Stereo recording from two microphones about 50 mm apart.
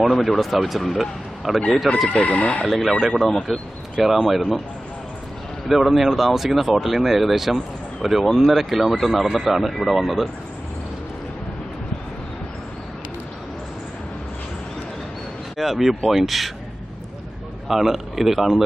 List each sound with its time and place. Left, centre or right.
0.0 s speech: centre
2.0 s chicken: left
2.6 s speech: centre
5.6 s speech: centre
15.5 s speech: centre
17.7 s speech: centre